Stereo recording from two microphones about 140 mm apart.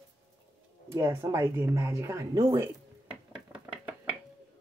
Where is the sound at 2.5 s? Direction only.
15° right (ahead or behind).